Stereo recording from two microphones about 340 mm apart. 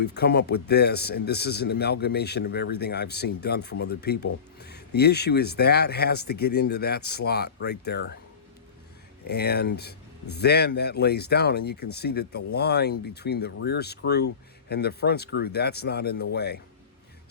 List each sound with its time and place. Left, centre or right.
0.0 s speech: left
9.2 s speech: left